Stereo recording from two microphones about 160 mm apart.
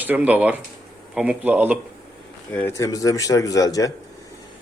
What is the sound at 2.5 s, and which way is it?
Speech, 10° left (ahead or behind).